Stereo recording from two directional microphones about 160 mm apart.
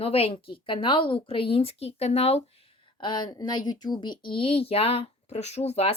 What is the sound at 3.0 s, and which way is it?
Speech, 30° left (ahead or behind).